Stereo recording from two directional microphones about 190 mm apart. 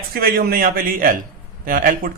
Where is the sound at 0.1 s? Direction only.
50° right (ahead or behind).